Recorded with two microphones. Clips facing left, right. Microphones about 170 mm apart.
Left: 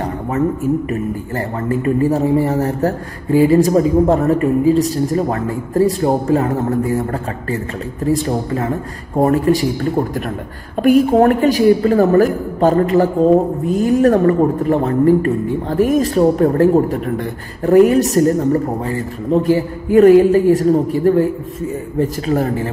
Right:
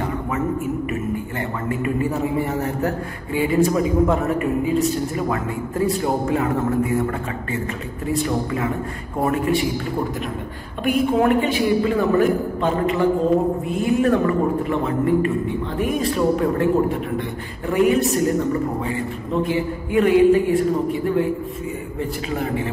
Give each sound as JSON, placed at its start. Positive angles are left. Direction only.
{"t": 1.7, "sound": "a man's voice", "side_deg": 35}
{"t": 8.1, "sound": "a man's voice", "side_deg": 35}